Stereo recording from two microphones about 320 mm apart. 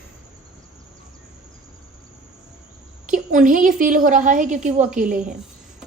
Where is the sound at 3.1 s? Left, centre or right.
Right.